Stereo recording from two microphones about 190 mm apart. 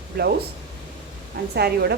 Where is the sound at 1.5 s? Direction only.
55° right (ahead or behind).